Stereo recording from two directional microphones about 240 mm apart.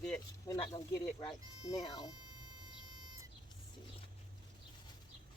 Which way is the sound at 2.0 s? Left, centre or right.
Centre.